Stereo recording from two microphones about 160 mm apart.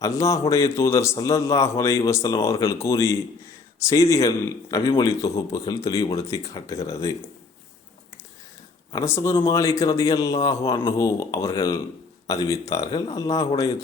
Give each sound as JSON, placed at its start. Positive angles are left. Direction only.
{"t": 0.0, "sound": "a man's voice", "side_deg": 20}
{"t": 8.9, "sound": "a man's voice", "side_deg": 15}